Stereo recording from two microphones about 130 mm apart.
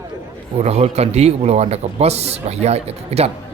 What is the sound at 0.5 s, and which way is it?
A man's voice, 55° right (ahead or behind).